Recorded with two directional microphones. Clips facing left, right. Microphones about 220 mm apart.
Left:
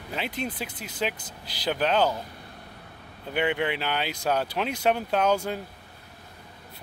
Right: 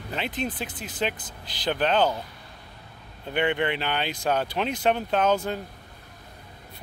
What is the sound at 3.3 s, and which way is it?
Speech, 5° left (ahead or behind).